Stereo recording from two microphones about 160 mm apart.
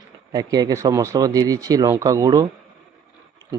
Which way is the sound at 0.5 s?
20° right (ahead or behind).